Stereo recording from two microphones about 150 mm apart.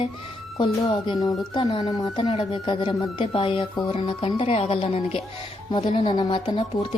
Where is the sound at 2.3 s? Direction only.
40° left (ahead or behind).